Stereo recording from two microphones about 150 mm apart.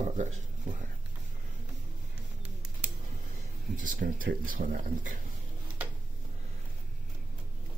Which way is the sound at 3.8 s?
65° right (ahead or behind).